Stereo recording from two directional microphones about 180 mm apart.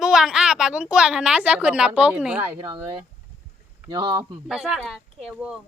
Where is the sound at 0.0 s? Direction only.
5° right (ahead or behind).